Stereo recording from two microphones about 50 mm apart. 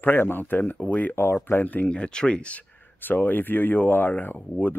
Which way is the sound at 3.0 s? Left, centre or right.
Left.